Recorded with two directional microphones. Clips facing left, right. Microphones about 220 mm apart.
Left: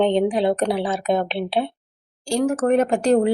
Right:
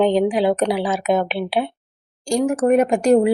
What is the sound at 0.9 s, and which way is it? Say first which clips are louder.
Speech: right 2 dB; 30° left (ahead or behind).